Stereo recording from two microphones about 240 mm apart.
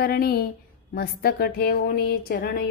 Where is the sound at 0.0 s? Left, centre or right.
Left.